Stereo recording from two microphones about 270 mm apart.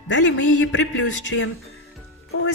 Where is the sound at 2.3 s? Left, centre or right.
Left.